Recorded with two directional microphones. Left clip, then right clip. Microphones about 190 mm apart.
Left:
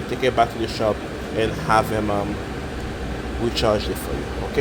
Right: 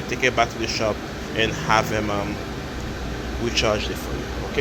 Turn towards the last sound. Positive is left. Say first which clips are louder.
# left 1 dB
turn(degrees=25)  # may be behind; listen again after turning